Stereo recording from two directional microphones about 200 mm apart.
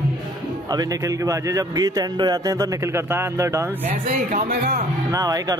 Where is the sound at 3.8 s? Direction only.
35° right (ahead or behind).